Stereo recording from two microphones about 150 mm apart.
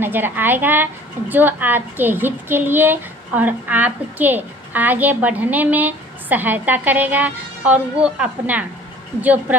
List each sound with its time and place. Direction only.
0.0 s a woman's voice: 15° right (ahead or behind)